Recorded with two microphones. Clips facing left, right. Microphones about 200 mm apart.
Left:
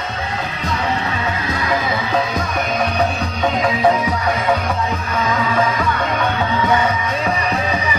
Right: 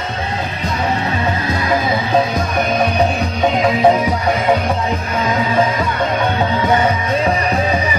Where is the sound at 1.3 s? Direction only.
30° right (ahead or behind).